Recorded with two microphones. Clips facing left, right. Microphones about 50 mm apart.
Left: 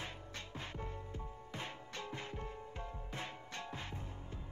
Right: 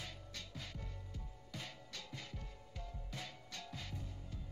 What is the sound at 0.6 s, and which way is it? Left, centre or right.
Music, left.